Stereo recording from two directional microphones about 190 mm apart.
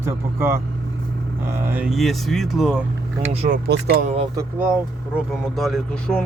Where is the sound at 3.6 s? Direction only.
55° right (ahead or behind).